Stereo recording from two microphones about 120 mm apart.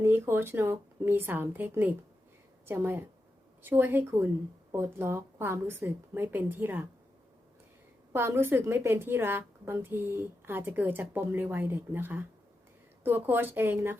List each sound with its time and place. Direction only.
0.0 s a woman's voice: 20° right (ahead or behind)
8.1 s a woman's voice: 20° right (ahead or behind)